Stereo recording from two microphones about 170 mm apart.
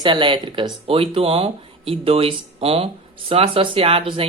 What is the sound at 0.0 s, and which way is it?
Speech, 30° right (ahead or behind).